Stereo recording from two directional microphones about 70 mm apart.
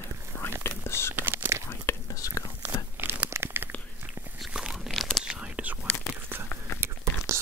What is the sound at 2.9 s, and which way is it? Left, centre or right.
Crumpling, right.